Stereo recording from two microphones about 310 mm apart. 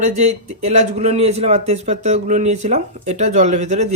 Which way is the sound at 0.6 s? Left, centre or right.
Right.